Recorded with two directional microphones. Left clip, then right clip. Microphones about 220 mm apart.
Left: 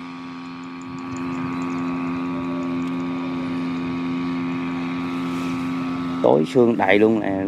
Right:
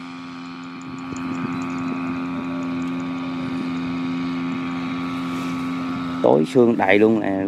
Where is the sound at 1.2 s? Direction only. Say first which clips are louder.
Even; 45° right (ahead or behind).